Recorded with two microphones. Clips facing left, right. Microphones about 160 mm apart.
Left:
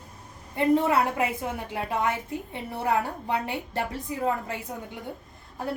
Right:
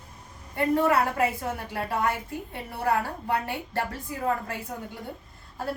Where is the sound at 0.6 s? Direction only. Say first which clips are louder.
Left 1 dB; 20° left (ahead or behind).